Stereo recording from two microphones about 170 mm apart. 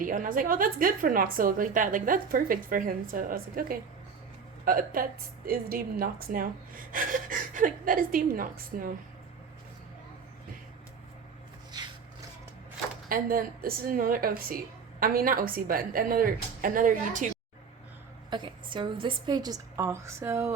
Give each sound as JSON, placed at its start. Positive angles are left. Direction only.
{"t": 0.0, "sound": "a woman's voice", "side_deg": -50}
{"t": 13.1, "sound": "a woman's voice", "side_deg": -60}
{"t": 18.3, "sound": "a woman's voice", "side_deg": -30}